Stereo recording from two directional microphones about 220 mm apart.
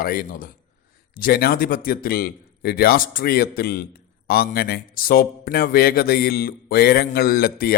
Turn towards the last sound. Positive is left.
turn(degrees=45)  # may be behind; listen again after turning